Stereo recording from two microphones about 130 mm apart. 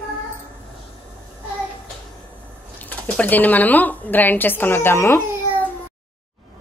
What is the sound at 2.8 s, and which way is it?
Speech, 10° left (ahead or behind).